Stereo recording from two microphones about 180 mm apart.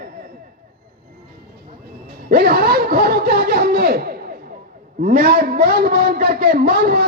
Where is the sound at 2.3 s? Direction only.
60° right (ahead or behind).